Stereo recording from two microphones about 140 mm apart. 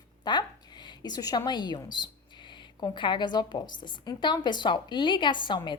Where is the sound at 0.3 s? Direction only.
30° left (ahead or behind).